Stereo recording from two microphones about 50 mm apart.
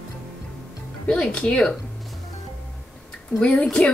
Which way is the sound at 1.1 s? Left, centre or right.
Centre.